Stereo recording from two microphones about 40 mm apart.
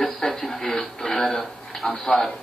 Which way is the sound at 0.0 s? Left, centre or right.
Centre.